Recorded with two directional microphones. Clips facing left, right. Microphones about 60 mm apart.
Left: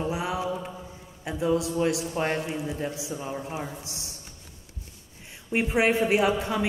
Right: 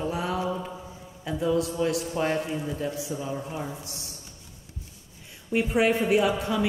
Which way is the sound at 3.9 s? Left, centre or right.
Right.